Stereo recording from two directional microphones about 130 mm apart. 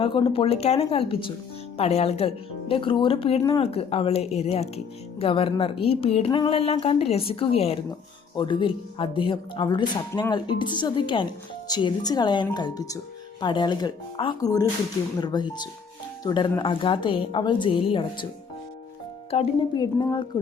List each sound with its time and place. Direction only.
0.0 s speech: 40° left (ahead or behind)
8.4 s a woman's voice: 35° left (ahead or behind)
19.3 s speech: 50° left (ahead or behind)
19.7 s a woman's voice: 30° left (ahead or behind)